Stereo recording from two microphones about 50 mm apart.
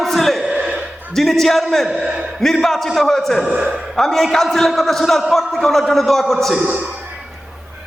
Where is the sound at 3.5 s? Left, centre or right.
Right.